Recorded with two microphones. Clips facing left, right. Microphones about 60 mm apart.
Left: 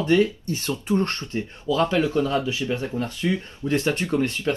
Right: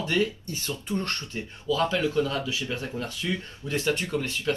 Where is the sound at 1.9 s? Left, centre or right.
Left.